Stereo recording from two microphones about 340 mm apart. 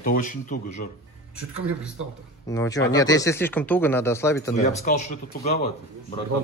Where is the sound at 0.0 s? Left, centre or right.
Left.